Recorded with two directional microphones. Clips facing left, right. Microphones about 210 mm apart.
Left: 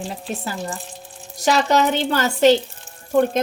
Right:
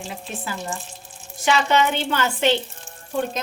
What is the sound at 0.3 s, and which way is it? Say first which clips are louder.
A woman's voice: left 2 dB; 40° left (ahead or behind).